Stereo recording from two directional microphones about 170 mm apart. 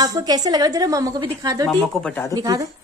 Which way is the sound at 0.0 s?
25° right (ahead or behind).